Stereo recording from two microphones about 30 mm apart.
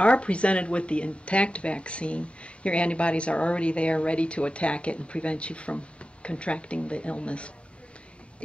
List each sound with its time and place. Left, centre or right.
0.0 s speech: left